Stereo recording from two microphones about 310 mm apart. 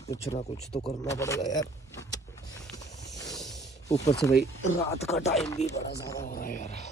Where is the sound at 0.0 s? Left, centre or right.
Centre.